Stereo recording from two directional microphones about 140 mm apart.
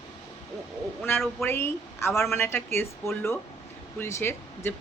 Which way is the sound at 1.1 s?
15° left (ahead or behind).